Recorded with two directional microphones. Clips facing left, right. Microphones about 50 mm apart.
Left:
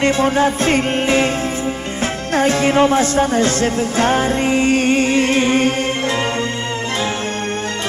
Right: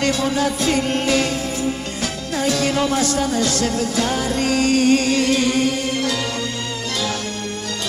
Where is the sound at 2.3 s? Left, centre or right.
Left.